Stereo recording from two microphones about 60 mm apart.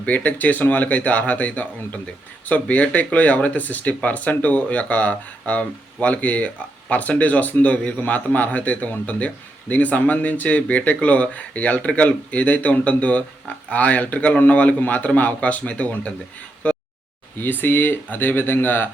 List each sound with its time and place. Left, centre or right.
0.0 s speech: left
16.6 s a sound: left
17.4 s speech: left